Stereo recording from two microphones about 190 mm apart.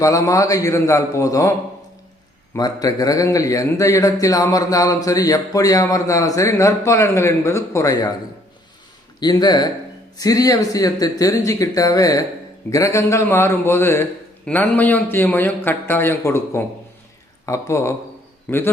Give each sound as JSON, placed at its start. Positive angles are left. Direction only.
{"t": 0.0, "sound": "a man's voice", "side_deg": 15}
{"t": 9.2, "sound": "a man's voice", "side_deg": 20}